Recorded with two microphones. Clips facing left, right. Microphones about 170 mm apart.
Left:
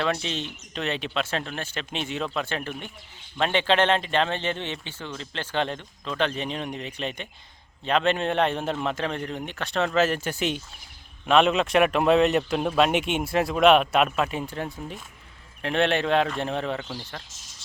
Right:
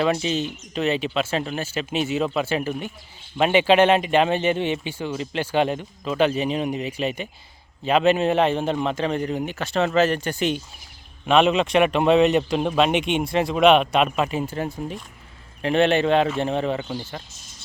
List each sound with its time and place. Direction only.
0.0 s speech: 5° right (ahead or behind)